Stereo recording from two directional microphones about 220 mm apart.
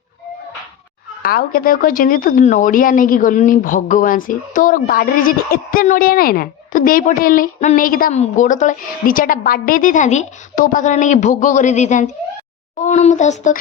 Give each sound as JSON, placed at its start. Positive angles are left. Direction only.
{"t": 1.2, "sound": "speech", "side_deg": 40}